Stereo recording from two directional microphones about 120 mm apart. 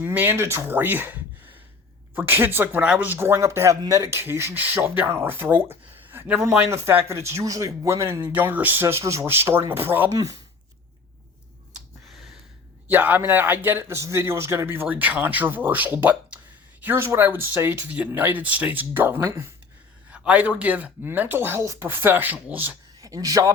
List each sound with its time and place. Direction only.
0.0 s a man's voice: 15° right (ahead or behind)
10.1 s speech: 30° right (ahead or behind)
12.0 s a sound: centre (ahead or behind)
12.9 s a man's voice: 15° right (ahead or behind)
20.1 s a man's voice: 10° right (ahead or behind)
23.0 s speech: 30° right (ahead or behind)